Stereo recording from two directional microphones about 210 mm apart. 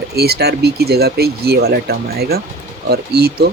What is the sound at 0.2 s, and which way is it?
Speech, 50° right (ahead or behind).